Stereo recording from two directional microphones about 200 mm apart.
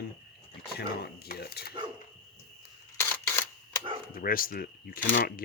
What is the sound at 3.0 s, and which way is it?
Camera, 10° left (ahead or behind).